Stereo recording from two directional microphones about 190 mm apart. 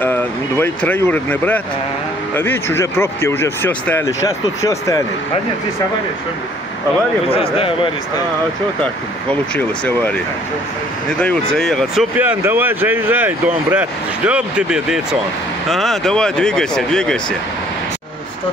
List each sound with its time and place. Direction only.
0.0 s speech: 10° left (ahead or behind)
7.2 s speech: 30° left (ahead or behind)
9.3 s speech: 10° left (ahead or behind)
11.1 s speech: 5° left (ahead or behind)